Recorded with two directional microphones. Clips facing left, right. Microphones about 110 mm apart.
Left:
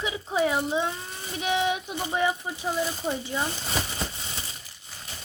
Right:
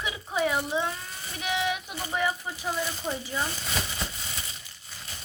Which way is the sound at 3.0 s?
20° left (ahead or behind).